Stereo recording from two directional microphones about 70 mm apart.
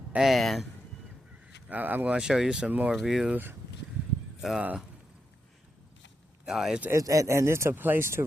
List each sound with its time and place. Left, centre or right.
0.2 s speech: centre
1.7 s speech: right
2.1 s speech: centre
2.6 s speech: right
2.9 s speech: centre
4.4 s speech: centre
6.4 s speech: centre
6.9 s speech: right